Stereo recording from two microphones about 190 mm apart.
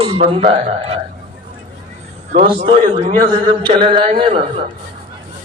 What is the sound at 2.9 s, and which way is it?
A man's voice, 25° right (ahead or behind).